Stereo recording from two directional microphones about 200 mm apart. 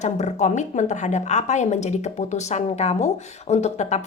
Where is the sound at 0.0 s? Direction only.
35° left (ahead or behind).